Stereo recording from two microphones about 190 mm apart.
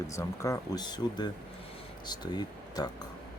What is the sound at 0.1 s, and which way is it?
Speech, 15° left (ahead or behind).